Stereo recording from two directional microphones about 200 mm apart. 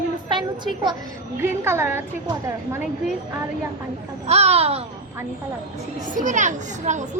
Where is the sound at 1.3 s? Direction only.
10° right (ahead or behind).